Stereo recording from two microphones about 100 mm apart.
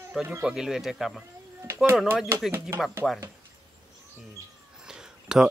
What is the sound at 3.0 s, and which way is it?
Speech, centre (ahead or behind).